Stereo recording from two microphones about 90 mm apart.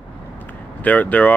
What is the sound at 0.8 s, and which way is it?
Speech, 20° left (ahead or behind).